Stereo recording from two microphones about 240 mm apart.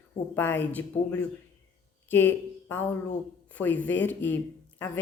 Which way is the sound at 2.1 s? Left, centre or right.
Centre.